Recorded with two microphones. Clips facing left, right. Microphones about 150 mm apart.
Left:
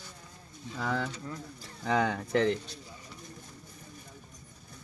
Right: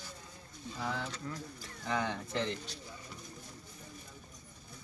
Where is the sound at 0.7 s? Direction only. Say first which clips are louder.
Left 6 dB; 80° left.